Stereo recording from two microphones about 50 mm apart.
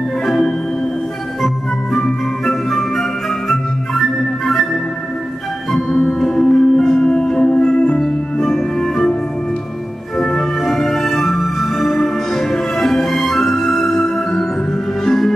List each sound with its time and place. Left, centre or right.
0.3 s organ: centre
2.4 s music: centre
5.7 s music: centre
10.1 s music: centre